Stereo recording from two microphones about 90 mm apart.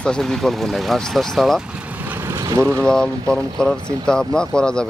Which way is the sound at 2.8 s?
5° left (ahead or behind).